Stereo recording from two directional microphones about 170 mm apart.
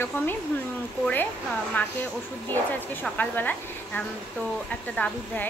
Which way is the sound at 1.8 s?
10° left (ahead or behind).